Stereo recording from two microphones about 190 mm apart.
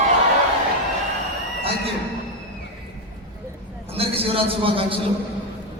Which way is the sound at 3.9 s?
30° right (ahead or behind).